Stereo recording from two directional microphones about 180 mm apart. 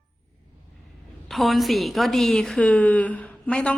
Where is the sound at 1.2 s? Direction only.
Centre (ahead or behind).